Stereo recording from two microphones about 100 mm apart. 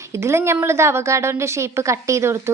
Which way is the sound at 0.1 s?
30° right (ahead or behind).